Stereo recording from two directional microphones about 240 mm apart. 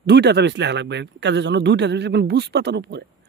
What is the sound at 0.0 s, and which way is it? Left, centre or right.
Speech, right.